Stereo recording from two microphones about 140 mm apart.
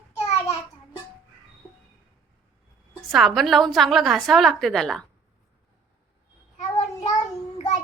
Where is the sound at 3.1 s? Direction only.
Centre (ahead or behind).